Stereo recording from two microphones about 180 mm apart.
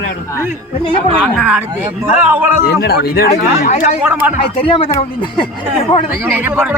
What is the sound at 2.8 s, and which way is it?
Speech, 60° left (ahead or behind).